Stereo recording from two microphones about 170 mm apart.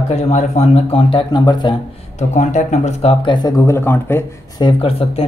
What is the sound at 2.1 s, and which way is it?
Speech, 45° left (ahead or behind).